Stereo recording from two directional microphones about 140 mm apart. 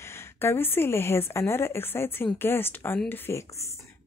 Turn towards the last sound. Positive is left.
turn(degrees=20)  # may be behind; listen again after turning